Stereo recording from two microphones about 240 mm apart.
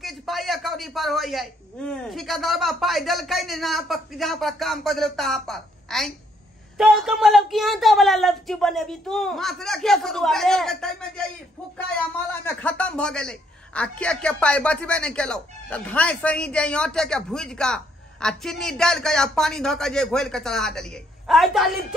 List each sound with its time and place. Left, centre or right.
0.0 s a man's voice: centre
12.4 s a man's voice: centre